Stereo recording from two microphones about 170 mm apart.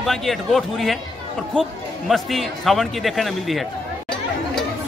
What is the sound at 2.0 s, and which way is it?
Speech, centre (ahead or behind).